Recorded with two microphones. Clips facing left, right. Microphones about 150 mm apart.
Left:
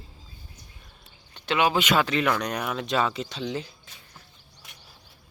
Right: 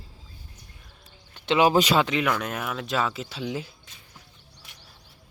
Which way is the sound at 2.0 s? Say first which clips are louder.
Right 1 dB; 15° right (ahead or behind).